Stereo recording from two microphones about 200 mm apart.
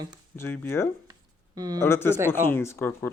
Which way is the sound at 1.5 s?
20° right (ahead or behind).